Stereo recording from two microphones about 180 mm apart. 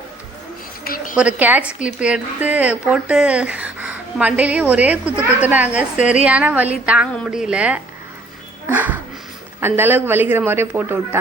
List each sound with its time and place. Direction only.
1.1 s a woman's voice: 5° right (ahead or behind)
8.7 s a sound: 10° right (ahead or behind)
9.6 s a woman's voice: 10° right (ahead or behind)